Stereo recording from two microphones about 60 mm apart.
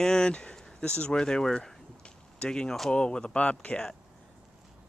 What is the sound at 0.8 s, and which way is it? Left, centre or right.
Speech, left.